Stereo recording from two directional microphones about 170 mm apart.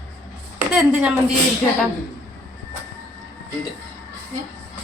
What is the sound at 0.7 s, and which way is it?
Speech, 5° right (ahead or behind).